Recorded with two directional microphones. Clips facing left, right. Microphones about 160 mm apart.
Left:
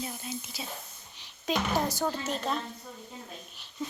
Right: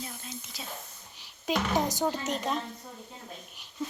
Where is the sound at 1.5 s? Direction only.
15° right (ahead or behind).